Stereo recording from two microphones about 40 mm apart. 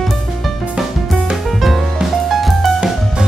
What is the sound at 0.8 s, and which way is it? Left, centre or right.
Music, right.